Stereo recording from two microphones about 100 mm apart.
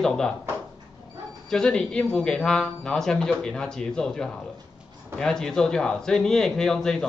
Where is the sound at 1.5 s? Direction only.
5° left (ahead or behind).